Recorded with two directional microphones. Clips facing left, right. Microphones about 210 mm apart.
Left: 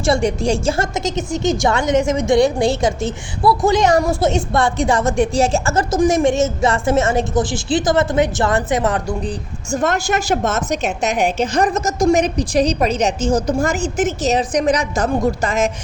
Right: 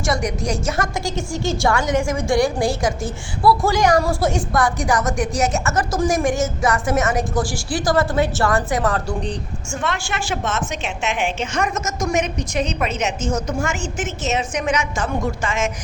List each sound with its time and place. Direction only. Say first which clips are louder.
0.0 s a woman's voice: left 5 dB; 30° left (ahead or behind)
9.7 s a woman's voice: left 7 dB; 40° left (ahead or behind)